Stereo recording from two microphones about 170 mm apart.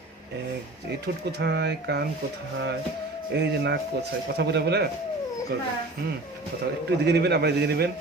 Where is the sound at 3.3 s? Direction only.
85° right.